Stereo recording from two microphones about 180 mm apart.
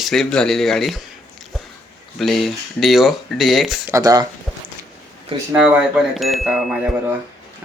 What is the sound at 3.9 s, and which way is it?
Speech, 20° right (ahead or behind).